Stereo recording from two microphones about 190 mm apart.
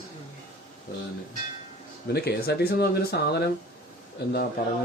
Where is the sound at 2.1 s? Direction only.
55° left (ahead or behind).